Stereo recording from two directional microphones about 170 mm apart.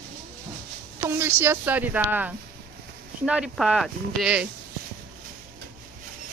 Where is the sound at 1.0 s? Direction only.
15° right (ahead or behind).